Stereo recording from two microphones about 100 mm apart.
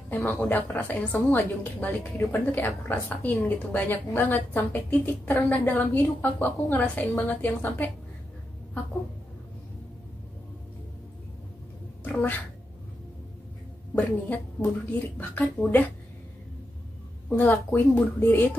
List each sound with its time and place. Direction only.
0.1 s a woman's voice: 20° left (ahead or behind)
12.0 s speech: 20° left (ahead or behind)
13.9 s a woman's voice: 15° left (ahead or behind)
17.4 s a woman's voice: 15° left (ahead or behind)